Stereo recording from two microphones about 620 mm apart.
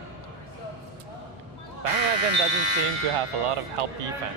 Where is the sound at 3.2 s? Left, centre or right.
Right.